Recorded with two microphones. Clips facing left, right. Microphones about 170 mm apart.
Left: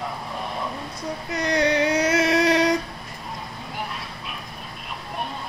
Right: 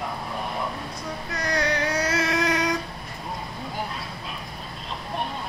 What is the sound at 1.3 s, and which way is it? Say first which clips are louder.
Child singing: left 5 dB; 20° left (ahead or behind).